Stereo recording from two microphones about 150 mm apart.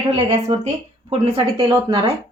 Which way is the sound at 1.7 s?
30° right (ahead or behind).